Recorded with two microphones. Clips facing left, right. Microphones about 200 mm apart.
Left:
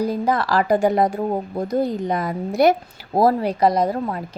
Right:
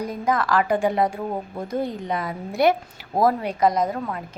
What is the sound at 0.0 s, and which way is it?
A woman's voice, 35° left (ahead or behind).